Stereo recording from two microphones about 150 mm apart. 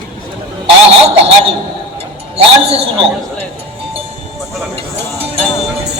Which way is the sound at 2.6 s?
40° right (ahead or behind).